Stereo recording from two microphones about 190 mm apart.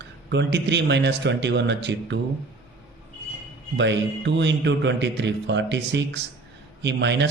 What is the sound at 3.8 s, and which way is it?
A man's voice, 70° right (ahead or behind).